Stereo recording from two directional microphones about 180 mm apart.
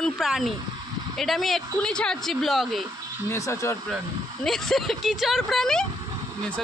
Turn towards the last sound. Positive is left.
turn(degrees=0)  # may be behind; listen again after turning